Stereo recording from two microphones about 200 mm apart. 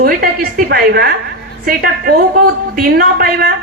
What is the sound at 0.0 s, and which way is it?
A woman's voice, 45° right (ahead or behind).